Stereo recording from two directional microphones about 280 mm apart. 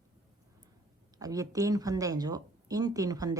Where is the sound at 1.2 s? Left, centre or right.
Centre.